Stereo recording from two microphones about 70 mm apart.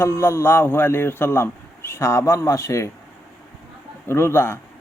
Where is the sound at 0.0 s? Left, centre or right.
Left.